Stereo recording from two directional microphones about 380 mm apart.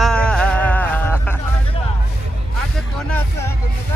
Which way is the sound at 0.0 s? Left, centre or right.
Centre.